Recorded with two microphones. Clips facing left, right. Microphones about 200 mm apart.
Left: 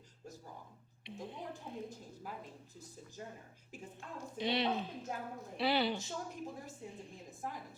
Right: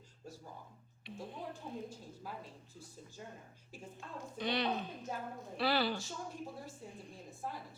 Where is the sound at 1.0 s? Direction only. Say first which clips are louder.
Even; 20° left (ahead or behind).